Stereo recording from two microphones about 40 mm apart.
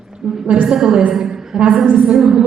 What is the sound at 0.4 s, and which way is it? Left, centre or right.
Speech, right.